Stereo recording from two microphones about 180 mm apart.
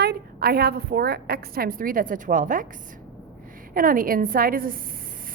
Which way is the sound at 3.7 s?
50° right (ahead or behind).